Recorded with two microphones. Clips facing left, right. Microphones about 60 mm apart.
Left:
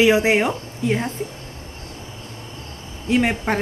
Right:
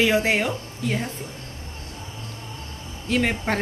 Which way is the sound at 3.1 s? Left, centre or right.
Centre.